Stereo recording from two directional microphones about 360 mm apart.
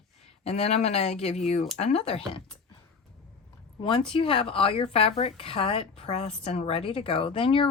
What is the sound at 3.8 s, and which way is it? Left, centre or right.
Speech, centre.